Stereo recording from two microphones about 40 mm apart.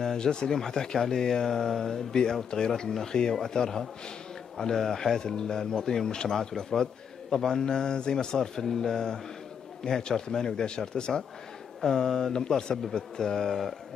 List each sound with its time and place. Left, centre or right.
0.0 s speech: centre